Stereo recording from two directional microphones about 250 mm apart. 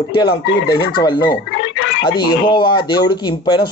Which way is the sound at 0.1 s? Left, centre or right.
Centre.